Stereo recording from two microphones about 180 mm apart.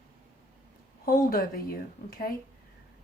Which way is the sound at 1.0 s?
55° left (ahead or behind).